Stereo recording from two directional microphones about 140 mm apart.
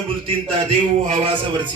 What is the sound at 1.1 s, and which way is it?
Speech, 40° right (ahead or behind).